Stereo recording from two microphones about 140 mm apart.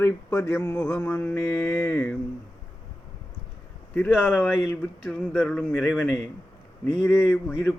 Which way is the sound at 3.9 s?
10° left (ahead or behind).